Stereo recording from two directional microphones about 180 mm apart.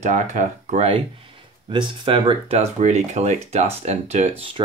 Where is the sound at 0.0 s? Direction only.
40° right (ahead or behind).